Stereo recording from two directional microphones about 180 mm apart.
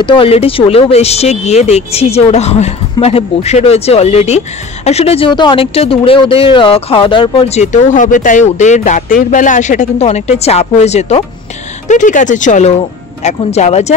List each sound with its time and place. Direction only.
0.0 s speech: 30° left (ahead or behind)